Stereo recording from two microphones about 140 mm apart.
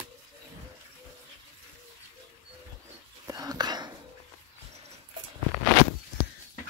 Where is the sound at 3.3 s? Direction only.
25° right (ahead or behind).